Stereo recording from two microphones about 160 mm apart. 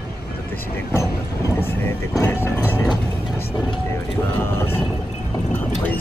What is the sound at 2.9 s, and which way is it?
Speech, 25° left (ahead or behind).